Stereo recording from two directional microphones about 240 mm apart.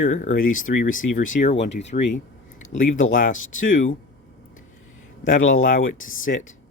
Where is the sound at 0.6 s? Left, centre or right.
Left.